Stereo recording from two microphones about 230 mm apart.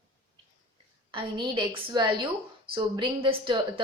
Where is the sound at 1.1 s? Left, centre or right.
Right.